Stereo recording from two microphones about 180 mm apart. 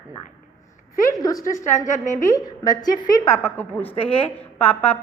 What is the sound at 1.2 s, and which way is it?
A woman's voice, 20° left (ahead or behind).